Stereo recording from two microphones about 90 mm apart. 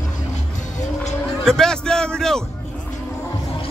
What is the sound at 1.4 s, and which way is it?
A man's voice, 5° left (ahead or behind).